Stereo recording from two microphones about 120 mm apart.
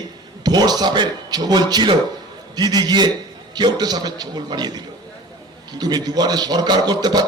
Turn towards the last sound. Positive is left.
turn(degrees=-35)  # may be behind; listen again after turning